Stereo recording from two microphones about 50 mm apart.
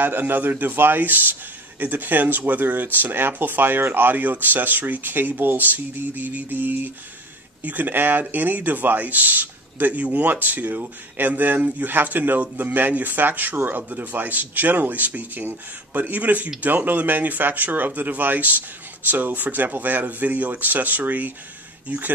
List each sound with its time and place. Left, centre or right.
0.0 s speech: right